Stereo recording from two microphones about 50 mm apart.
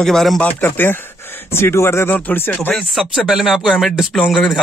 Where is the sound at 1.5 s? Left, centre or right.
Left.